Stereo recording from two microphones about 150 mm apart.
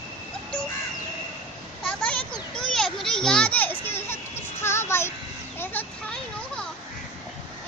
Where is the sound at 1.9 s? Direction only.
10° left (ahead or behind).